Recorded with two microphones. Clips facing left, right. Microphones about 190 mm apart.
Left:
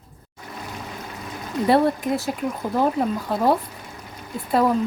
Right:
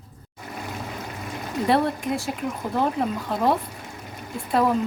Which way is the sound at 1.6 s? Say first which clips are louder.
Left 4 dB; 5° left (ahead or behind).